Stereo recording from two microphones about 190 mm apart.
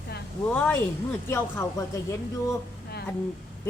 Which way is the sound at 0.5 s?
5° left (ahead or behind).